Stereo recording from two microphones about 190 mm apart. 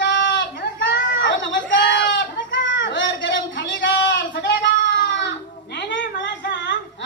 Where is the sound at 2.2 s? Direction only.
75° left (ahead or behind).